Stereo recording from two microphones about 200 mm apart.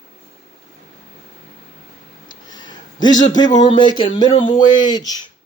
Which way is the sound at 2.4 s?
20° left (ahead or behind).